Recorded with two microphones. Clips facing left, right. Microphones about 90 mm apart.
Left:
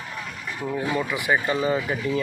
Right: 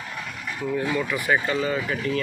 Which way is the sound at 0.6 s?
15° left (ahead or behind).